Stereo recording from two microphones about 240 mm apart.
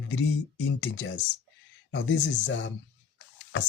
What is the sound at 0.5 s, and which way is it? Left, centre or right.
Speech, left.